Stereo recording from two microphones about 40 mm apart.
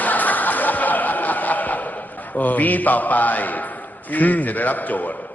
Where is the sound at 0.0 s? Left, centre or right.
Left.